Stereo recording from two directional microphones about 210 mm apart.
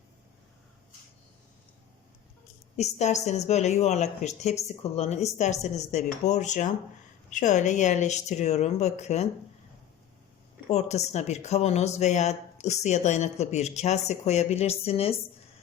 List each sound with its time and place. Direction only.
2.7 s speech: 30° left (ahead or behind)
10.7 s speech: 30° left (ahead or behind)